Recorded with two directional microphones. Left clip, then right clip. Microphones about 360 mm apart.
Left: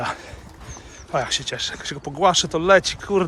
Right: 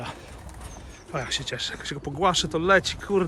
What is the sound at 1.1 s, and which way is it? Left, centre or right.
Speech, centre.